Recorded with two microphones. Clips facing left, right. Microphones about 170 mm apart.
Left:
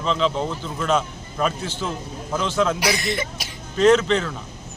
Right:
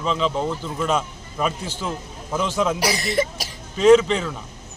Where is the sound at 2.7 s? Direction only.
35° right (ahead or behind).